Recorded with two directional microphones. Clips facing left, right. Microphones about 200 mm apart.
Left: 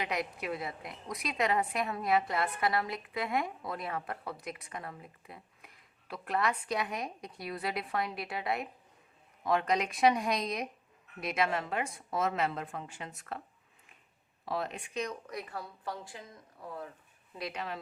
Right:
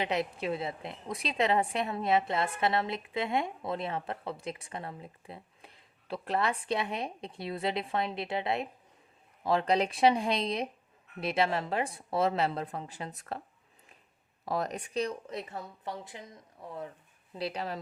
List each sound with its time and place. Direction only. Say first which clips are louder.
0.0 s a woman's voice: right 4 dB; 30° right (ahead or behind)
14.4 s a woman's voice: right 3 dB; 40° right (ahead or behind); by 16.9 s 20° right (ahead or behind)
17.3 s speech: right 4 dB; 30° right (ahead or behind)